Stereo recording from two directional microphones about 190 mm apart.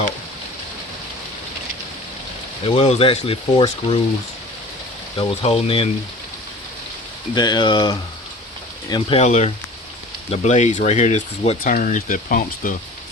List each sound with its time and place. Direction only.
2.6 s speech: 35° left (ahead or behind)
5.3 s speech: 30° left (ahead or behind)
7.3 s speech: 25° left (ahead or behind); by 12.7 s 45° left (ahead or behind)